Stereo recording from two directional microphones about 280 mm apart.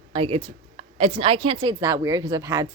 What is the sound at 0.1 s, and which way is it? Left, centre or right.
A woman's voice, centre.